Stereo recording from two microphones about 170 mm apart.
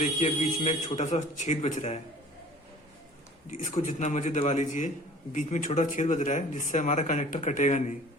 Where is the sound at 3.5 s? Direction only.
45° left (ahead or behind).